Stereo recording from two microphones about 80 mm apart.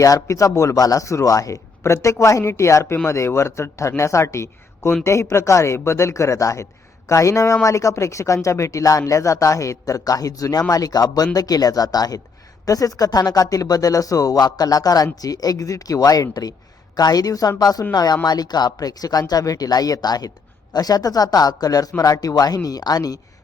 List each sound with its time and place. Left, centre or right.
0.0 s a man's voice: left